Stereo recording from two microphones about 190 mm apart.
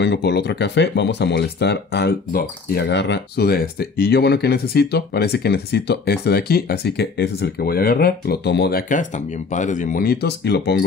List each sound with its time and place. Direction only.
0.0 s speech: 65° left (ahead or behind)